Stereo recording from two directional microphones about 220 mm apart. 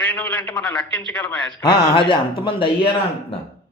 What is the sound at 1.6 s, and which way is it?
Speech, 20° left (ahead or behind).